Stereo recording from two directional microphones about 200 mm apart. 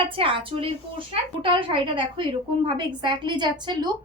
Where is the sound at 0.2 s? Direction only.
25° right (ahead or behind).